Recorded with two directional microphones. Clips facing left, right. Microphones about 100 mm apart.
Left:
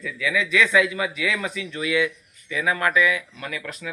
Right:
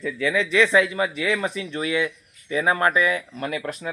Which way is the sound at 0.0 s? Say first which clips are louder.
Right 2 dB; 35° right (ahead or behind).